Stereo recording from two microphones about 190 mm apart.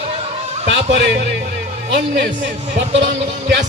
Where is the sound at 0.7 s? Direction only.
65° right (ahead or behind).